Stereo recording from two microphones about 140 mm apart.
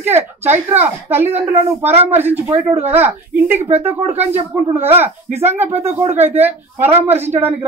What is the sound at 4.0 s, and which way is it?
Speech, 50° right (ahead or behind).